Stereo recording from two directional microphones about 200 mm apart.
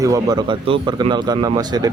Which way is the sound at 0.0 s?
20° right (ahead or behind).